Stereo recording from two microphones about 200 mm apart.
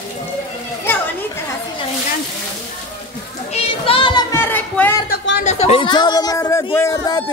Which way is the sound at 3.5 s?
25° left (ahead or behind).